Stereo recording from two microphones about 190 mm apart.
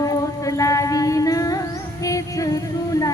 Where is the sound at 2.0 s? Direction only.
20° left (ahead or behind).